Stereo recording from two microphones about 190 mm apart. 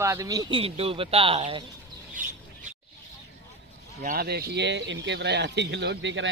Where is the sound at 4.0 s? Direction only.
50° right (ahead or behind); by 6.3 s 75° right (ahead or behind).